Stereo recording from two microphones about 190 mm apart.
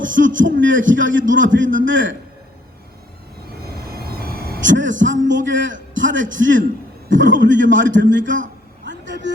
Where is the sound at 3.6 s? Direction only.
55° right (ahead or behind); by 6.2 s 80° right.